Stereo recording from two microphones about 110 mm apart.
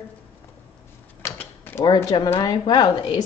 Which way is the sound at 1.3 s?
20° left (ahead or behind).